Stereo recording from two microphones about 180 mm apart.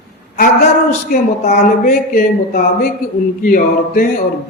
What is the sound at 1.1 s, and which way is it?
A man's voice, 55° left (ahead or behind).